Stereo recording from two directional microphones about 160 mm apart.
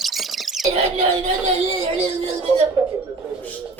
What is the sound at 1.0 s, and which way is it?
Speech, 40° right (ahead or behind).